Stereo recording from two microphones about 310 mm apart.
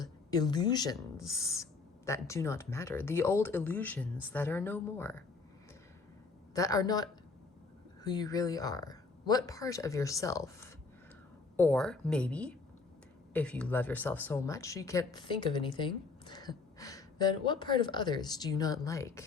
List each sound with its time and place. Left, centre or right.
0.0 s speech: centre
6.5 s speech: centre